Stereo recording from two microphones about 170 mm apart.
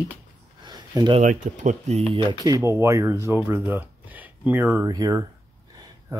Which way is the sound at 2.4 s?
20° right (ahead or behind).